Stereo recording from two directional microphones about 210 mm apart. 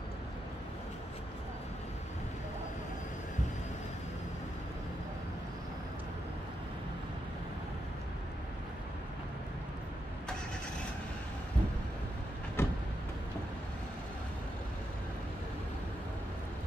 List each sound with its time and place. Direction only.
12.6 s vehicle: 10° left (ahead or behind)